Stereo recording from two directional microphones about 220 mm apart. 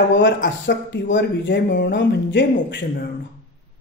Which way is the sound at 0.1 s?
55° left (ahead or behind).